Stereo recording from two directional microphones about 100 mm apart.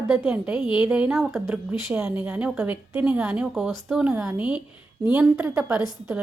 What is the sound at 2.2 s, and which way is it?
A woman's voice, 15° right (ahead or behind).